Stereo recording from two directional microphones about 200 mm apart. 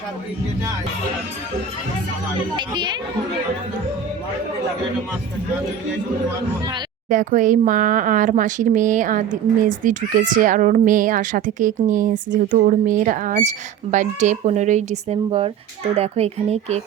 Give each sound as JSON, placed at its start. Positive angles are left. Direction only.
{"t": 2.6, "sound": "speech", "side_deg": -20}
{"t": 7.1, "sound": "speech", "side_deg": -40}